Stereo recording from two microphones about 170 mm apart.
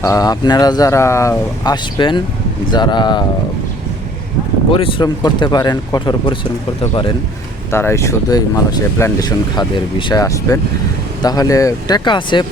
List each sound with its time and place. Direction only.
0.0 s speech: 20° left (ahead or behind)
4.7 s speech: 30° left (ahead or behind)
7.7 s speech: 15° left (ahead or behind)